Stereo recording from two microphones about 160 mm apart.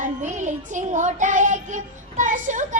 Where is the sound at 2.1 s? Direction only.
50° right (ahead or behind).